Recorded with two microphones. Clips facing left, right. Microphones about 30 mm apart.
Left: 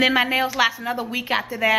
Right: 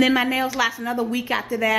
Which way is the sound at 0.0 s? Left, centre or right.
Centre.